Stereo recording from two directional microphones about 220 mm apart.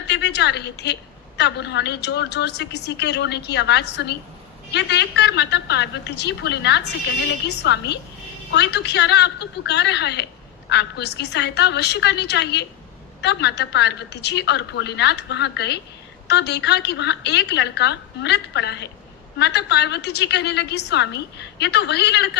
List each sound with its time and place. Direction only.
0.1 s a woman's voice: 50° left (ahead or behind)